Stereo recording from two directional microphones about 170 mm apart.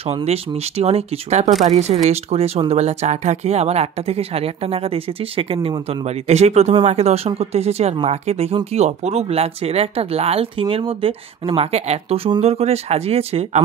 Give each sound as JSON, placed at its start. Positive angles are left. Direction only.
{"t": 0.3, "sound": "speech", "side_deg": -35}